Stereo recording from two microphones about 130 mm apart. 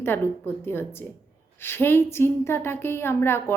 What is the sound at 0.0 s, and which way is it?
Speech, 15° left (ahead or behind).